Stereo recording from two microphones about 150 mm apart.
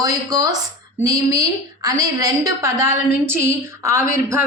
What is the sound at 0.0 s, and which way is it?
A woman's voice, 25° right (ahead or behind).